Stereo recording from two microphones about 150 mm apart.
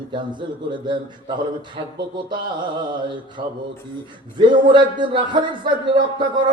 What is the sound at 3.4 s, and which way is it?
Speech, 75° right (ahead or behind).